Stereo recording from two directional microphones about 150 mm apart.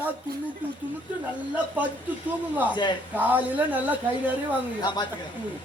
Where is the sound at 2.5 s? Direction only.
10° right (ahead or behind).